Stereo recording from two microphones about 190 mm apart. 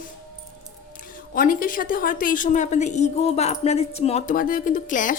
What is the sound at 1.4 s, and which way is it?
A woman's voice, 45° left (ahead or behind).